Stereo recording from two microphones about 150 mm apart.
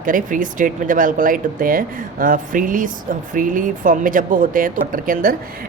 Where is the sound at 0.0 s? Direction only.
65° right (ahead or behind).